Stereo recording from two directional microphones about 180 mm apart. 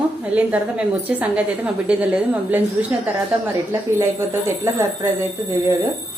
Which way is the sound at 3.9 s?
15° right (ahead or behind).